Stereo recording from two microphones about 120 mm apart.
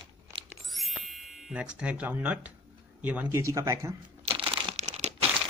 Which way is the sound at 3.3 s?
25° right (ahead or behind).